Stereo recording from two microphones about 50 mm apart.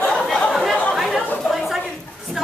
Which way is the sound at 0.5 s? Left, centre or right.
Centre.